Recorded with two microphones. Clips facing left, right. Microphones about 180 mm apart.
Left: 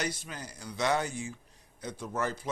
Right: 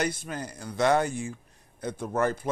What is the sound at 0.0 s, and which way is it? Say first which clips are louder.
Speech: right 6 dB; 55° right (ahead or behind).